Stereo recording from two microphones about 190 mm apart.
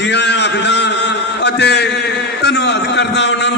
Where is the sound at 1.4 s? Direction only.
65° left (ahead or behind).